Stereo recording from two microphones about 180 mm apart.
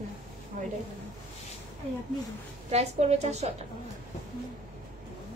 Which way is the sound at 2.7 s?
35° right (ahead or behind).